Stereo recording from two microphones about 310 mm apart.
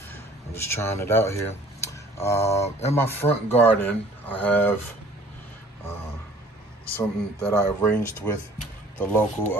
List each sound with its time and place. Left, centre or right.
0.1 s speech: centre
1.9 s tick: centre
2.6 s speech: left
3.0 s speech: centre
7.0 s speech: centre